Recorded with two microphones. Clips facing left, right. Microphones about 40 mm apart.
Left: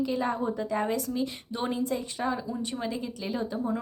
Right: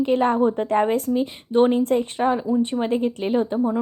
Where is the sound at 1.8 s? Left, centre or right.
Right.